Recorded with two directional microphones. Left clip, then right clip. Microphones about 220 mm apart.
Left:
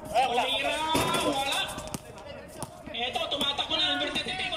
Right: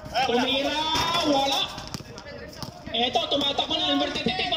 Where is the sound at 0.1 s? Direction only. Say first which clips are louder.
Right 1 dB; 15° left (ahead or behind).